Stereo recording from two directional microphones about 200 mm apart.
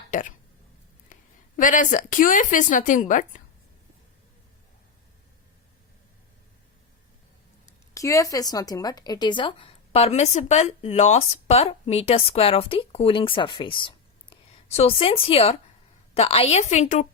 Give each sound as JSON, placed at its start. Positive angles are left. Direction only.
{"t": 0.1, "sound": "speech", "side_deg": 40}
{"t": 7.9, "sound": "a woman's voice", "side_deg": 15}